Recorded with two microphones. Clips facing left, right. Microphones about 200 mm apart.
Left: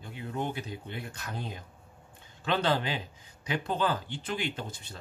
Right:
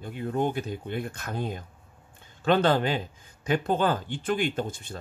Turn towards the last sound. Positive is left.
turn(degrees=-50)  # may be behind; listen again after turning